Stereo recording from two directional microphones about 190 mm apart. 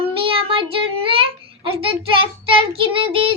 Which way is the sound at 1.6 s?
30° right (ahead or behind).